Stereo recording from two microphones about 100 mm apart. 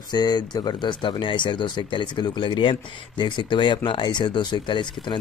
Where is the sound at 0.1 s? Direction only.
45° left (ahead or behind).